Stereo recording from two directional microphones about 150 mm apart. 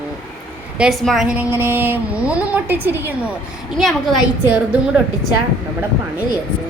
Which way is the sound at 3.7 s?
Centre (ahead or behind).